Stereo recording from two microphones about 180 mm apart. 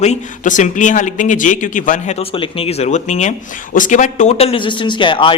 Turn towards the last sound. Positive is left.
turn(degrees=30)  # may be behind; listen again after turning